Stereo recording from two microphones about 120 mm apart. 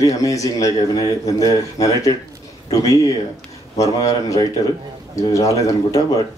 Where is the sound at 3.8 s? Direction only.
30° left (ahead or behind).